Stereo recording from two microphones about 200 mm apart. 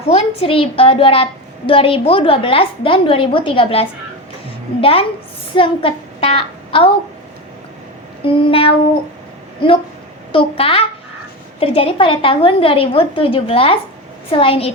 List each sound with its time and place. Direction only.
0.0 s a woman's voice: 30° left (ahead or behind)
8.2 s a woman's voice: 25° left (ahead or behind)
10.3 s a woman's voice: 25° left (ahead or behind)